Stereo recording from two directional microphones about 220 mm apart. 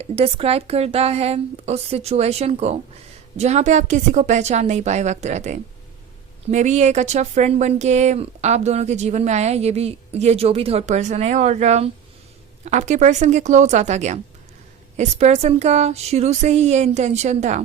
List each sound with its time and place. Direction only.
0.0 s a woman's voice: 25° right (ahead or behind)